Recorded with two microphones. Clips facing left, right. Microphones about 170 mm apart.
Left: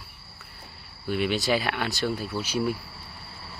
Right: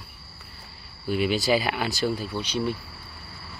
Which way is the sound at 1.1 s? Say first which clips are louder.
Right 2 dB; centre (ahead or behind).